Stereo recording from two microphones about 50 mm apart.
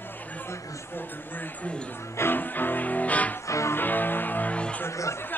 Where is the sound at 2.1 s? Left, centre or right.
Left.